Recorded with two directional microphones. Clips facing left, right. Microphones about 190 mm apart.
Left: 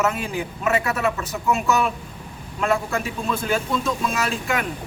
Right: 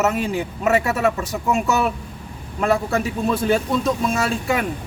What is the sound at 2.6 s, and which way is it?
Speech, 35° right (ahead or behind).